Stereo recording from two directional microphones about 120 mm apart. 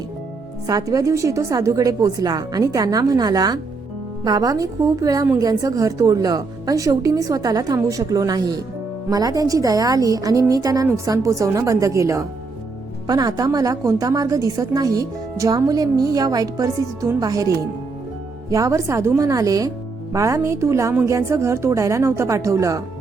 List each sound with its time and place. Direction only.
0.7 s a woman's voice: 30° right (ahead or behind)
18.5 s a woman's voice: 25° right (ahead or behind)